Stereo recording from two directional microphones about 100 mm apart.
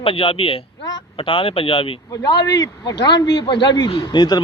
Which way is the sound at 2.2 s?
40° left (ahead or behind).